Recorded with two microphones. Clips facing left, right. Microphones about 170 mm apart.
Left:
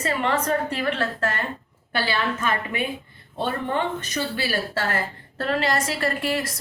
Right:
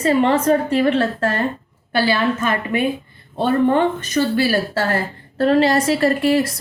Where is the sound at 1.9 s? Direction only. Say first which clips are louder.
Right 7 dB; 40° right (ahead or behind).